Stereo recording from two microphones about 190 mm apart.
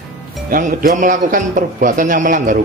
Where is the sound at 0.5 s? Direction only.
45° right (ahead or behind).